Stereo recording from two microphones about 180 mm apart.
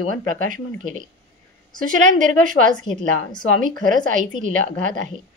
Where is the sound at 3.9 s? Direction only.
45° right (ahead or behind).